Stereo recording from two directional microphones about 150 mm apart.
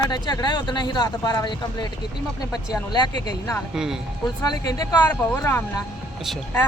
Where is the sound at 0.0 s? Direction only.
30° left (ahead or behind).